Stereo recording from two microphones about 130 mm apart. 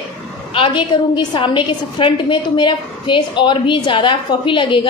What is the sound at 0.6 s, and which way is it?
A woman's voice, 35° left (ahead or behind).